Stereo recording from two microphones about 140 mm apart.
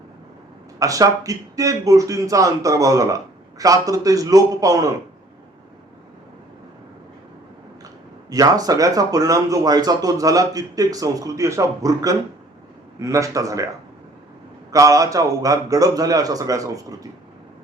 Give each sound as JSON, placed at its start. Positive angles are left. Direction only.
{"t": 0.8, "sound": "speech", "side_deg": -25}
{"t": 8.3, "sound": "speech", "side_deg": -25}
{"t": 14.7, "sound": "speech", "side_deg": -25}